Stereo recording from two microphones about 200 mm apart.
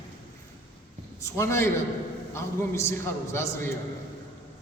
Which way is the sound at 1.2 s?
15° left (ahead or behind).